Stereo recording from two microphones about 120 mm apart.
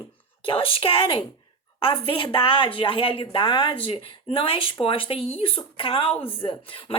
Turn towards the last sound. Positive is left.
turn(degrees=45)  # may be behind; listen again after turning